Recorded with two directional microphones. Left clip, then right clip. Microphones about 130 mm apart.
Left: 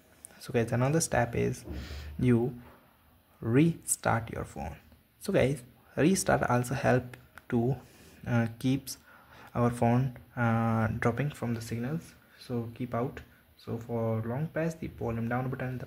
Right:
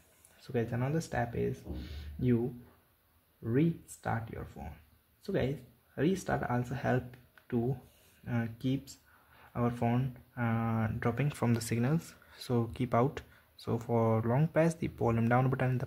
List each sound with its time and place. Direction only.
0.4 s speech: 20° left (ahead or behind)
3.4 s speech: 25° left (ahead or behind)
5.9 s speech: 15° left (ahead or behind)
7.1 s a sound: 25° left (ahead or behind)
8.3 s speech: 20° left (ahead or behind)
11.3 s speech: 35° right (ahead or behind)